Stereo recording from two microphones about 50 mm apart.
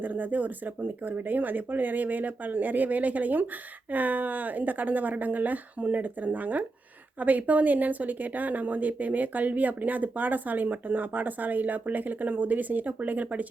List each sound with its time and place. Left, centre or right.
0.0 s speech: right